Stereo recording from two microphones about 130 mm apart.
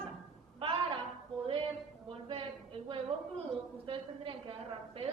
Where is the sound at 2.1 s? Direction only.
45° right (ahead or behind).